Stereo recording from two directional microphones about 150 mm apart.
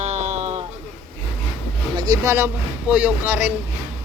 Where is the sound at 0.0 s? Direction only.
45° right (ahead or behind).